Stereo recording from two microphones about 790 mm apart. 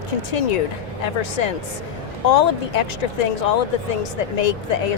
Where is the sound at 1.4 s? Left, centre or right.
Left.